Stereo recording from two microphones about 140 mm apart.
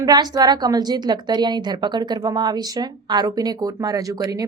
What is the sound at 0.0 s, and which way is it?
A woman's voice, 30° right (ahead or behind).